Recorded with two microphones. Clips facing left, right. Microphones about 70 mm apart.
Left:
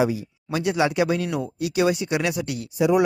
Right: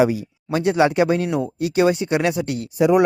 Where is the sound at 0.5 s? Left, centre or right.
Right.